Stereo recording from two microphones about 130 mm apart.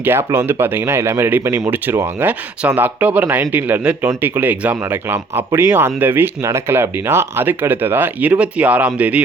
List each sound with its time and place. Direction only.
0.0 s speech: 20° right (ahead or behind)